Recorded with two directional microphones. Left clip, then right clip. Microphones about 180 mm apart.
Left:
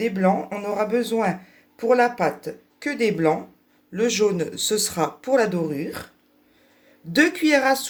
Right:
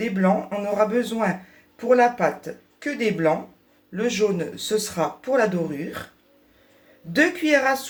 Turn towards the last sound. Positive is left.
turn(degrees=50)  # may be behind; listen again after turning